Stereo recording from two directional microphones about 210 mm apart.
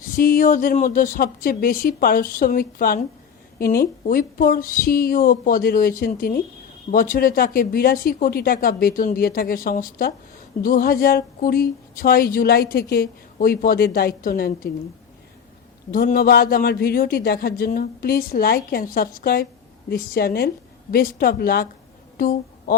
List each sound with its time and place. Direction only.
0.2 s speech: 40° left (ahead or behind)
15.9 s speech: 45° left (ahead or behind)
22.2 s a sound: 40° left (ahead or behind)